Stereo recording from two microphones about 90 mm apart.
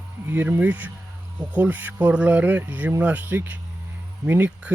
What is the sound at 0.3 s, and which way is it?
Speech, 20° right (ahead or behind).